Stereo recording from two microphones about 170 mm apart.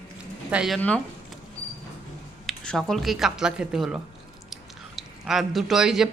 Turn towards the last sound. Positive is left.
turn(degrees=0)  # may be behind; listen again after turning